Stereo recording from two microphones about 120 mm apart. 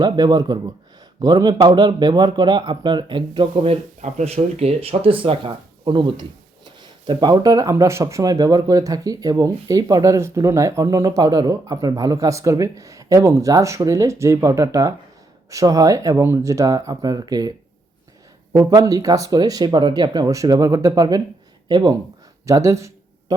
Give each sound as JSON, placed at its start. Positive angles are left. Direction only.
{"t": 0.0, "sound": "speech", "side_deg": -35}
{"t": 18.5, "sound": "speech", "side_deg": -35}
{"t": 22.4, "sound": "speech", "side_deg": -25}